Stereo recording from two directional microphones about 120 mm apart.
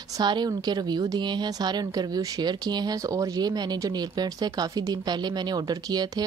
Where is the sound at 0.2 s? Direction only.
35° right (ahead or behind).